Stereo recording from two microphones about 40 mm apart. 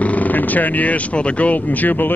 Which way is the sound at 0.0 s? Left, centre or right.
Left.